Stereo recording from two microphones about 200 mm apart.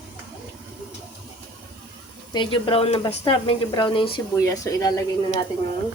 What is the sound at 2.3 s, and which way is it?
Speech, 25° left (ahead or behind).